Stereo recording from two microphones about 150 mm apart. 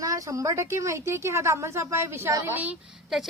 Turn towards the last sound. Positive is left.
turn(degrees=-5)  # may be behind; listen again after turning